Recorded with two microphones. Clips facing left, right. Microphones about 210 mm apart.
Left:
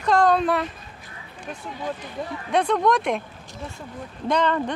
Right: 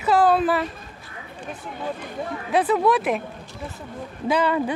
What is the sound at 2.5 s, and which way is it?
Speech, 5° right (ahead or behind).